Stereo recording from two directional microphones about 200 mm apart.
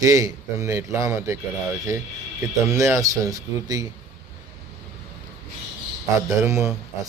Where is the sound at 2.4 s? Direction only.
15° right (ahead or behind).